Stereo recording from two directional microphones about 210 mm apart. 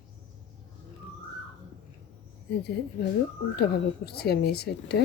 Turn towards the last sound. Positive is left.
turn(degrees=50)  # may be behind; listen again after turning